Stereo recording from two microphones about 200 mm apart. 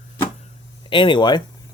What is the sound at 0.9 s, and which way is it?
Speech, 25° left (ahead or behind).